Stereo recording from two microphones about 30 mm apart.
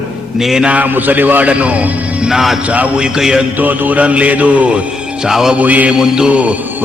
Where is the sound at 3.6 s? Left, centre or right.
Right.